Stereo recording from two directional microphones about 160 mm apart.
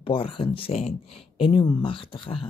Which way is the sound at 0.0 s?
35° left (ahead or behind).